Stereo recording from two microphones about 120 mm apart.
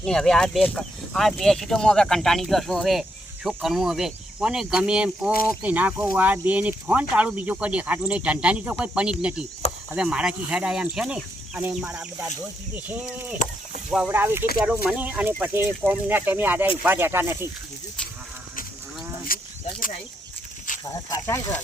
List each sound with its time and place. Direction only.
0.0 s speech: 5° left (ahead or behind); by 17.3 s 20° right (ahead or behind)
20.9 s speech: 25° left (ahead or behind)